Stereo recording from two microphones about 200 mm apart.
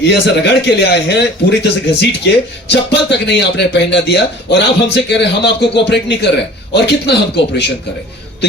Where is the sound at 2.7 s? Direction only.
60° left (ahead or behind).